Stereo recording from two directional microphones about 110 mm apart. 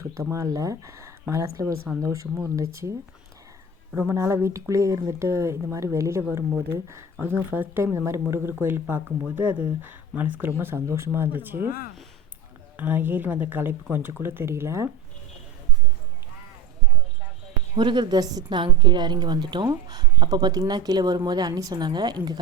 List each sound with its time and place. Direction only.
0.0 s speech: 30° right (ahead or behind)
3.9 s speech: 20° right (ahead or behind)
12.7 s speech: 15° right (ahead or behind)
17.7 s a woman's voice: 45° right (ahead or behind)